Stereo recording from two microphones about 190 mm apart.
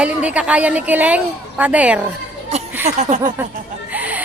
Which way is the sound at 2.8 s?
35° right (ahead or behind).